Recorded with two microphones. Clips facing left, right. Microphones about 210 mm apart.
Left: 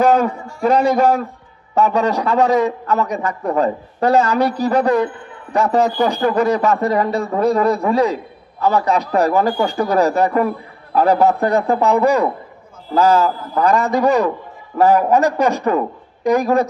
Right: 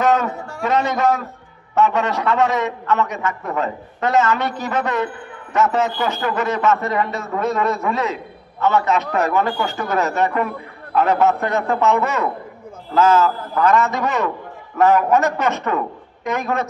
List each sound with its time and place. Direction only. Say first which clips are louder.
0.0 s a man's voice: left 4 dB; 30° left (ahead or behind)